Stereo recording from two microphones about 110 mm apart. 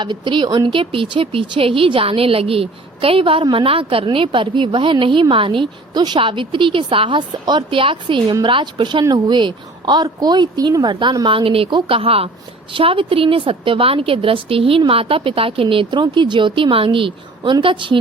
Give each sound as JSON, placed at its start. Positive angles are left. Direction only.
{"t": 0.0, "sound": "a woman's voice", "side_deg": -45}